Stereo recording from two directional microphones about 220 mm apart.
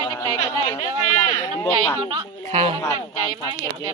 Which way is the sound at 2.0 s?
25° right (ahead or behind).